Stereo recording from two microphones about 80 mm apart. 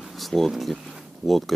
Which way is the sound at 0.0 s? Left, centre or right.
Centre.